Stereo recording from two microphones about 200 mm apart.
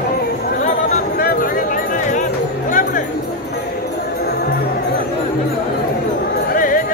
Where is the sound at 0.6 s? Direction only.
45° left (ahead or behind).